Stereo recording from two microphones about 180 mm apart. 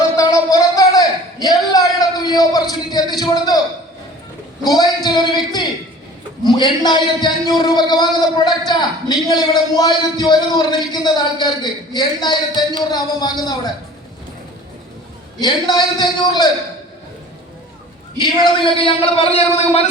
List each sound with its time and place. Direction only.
0.2 s a sound: 20° left (ahead or behind)
4.6 s a woman's voice: 20° left (ahead or behind)
6.4 s a man's voice: 25° left (ahead or behind)
15.4 s a man's voice: 25° left (ahead or behind)
18.2 s a man's voice: 25° left (ahead or behind)